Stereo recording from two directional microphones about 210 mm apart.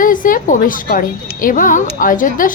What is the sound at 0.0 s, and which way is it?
A woman's voice, 40° left (ahead or behind).